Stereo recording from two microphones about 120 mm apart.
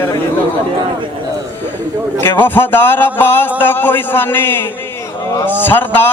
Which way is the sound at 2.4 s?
15° left (ahead or behind).